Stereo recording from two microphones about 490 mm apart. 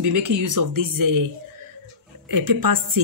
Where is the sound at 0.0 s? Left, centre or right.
Right.